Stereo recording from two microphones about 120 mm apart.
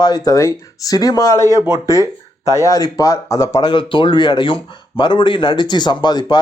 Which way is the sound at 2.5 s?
30° left (ahead or behind).